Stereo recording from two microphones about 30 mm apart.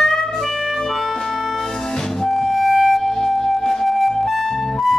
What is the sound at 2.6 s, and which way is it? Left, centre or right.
Music, centre.